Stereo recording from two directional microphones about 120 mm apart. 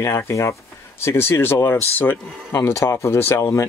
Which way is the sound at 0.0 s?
25° left (ahead or behind).